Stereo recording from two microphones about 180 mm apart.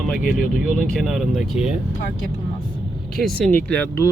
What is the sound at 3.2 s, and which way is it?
Speech, centre (ahead or behind).